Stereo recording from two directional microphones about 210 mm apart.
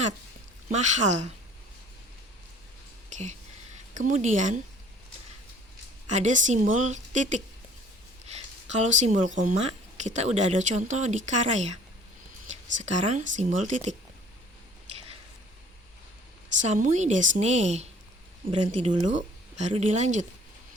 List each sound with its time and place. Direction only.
0.7 s speech: 35° right (ahead or behind)
3.1 s a sound: 35° right (ahead or behind)
3.9 s speech: 35° right (ahead or behind)
6.1 s speech: 35° right (ahead or behind)
8.3 s a sound: 35° right (ahead or behind)
9.4 s speech: 35° right (ahead or behind)
16.6 s speech: 35° right (ahead or behind)